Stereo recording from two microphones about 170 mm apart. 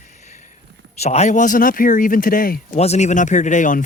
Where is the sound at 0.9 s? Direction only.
40° left (ahead or behind); by 2.6 s 55° left (ahead or behind).